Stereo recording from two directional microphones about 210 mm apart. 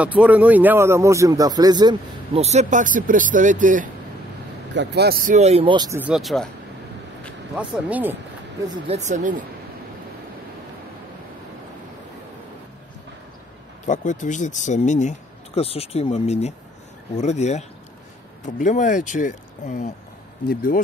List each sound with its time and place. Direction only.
0.0 s speech: 5° right (ahead or behind); by 3.9 s 40° right (ahead or behind)
4.7 s speech: 50° right (ahead or behind); by 5.9 s 20° right (ahead or behind)
5.9 s speech: 5° right (ahead or behind)
7.5 s speech: 10° right (ahead or behind)
8.6 s speech: 30° right (ahead or behind)
13.8 s speech: 35° left (ahead or behind)